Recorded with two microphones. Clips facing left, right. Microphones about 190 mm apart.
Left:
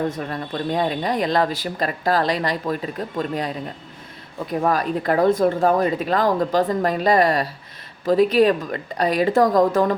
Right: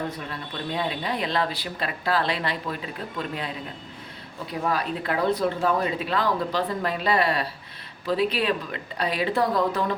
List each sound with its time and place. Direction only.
0.1 s speech: 45° left (ahead or behind)
4.6 s speech: 45° left (ahead or behind)